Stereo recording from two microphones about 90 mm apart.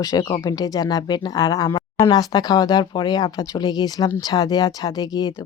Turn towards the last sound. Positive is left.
turn(degrees=45)  # may be behind; listen again after turning